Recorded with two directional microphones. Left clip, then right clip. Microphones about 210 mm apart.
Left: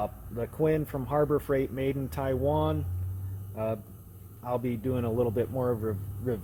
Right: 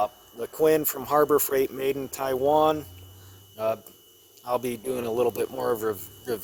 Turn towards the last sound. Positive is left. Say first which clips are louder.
# right 4 dB
turn(degrees=-50)  # may be behind; listen again after turning